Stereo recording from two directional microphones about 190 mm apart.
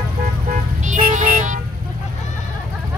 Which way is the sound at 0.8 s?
40° right (ahead or behind).